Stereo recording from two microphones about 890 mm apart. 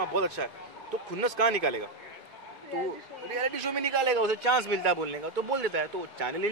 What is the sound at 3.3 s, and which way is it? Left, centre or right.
A man's voice, right.